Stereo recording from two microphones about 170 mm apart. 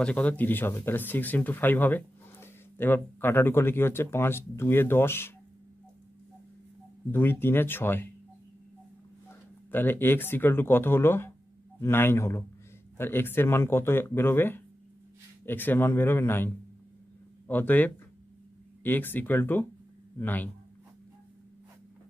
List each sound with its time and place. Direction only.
0.0 s speech: 5° left (ahead or behind)
7.1 s speech: 10° left (ahead or behind)
9.7 s speech: 10° left (ahead or behind)